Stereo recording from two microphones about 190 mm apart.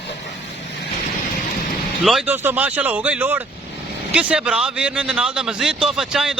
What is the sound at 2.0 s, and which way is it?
Speech, centre (ahead or behind).